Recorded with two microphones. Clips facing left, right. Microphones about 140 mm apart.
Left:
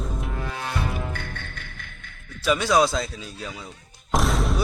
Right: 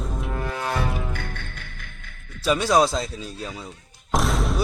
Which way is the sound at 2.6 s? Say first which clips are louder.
Right 1 dB; 35° right (ahead or behind).